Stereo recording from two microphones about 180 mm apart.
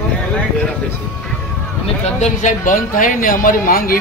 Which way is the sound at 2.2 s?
45° left (ahead or behind).